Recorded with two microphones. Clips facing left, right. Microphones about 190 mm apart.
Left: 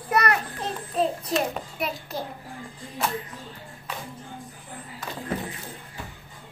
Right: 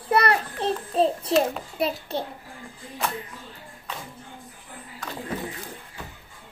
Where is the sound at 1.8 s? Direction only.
30° right (ahead or behind).